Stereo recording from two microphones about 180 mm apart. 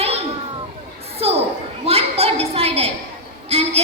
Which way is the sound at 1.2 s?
35° right (ahead or behind).